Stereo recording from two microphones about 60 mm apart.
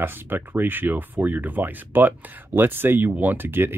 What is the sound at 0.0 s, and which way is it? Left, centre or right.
Speech, right.